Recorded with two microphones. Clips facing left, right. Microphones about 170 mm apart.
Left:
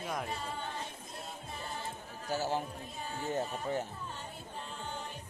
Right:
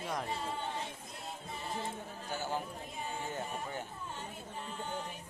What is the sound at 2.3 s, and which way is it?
Speech, 40° left (ahead or behind).